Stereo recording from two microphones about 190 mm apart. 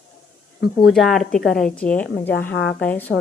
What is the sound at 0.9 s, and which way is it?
A woman's voice, centre (ahead or behind).